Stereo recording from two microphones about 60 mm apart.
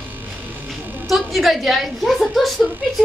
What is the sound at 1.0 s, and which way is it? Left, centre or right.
A woman's voice, centre.